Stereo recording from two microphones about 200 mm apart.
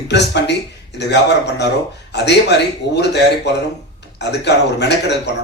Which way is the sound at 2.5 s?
60° left (ahead or behind).